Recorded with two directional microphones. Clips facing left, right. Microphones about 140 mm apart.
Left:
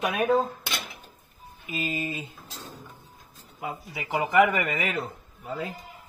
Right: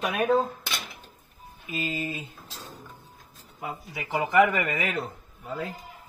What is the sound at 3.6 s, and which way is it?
Speech, 10° left (ahead or behind).